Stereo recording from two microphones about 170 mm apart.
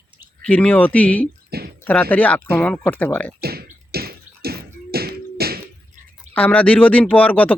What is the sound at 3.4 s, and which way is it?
Tap, 65° right (ahead or behind).